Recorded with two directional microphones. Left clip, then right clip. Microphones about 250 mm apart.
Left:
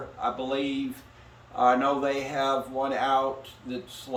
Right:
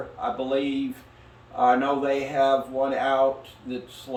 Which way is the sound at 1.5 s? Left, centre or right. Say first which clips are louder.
Right 2 dB; centre.